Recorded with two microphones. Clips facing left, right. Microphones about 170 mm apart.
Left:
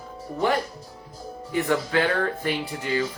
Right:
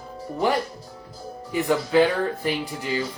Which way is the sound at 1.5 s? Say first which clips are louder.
Right 4 dB; 15° right (ahead or behind).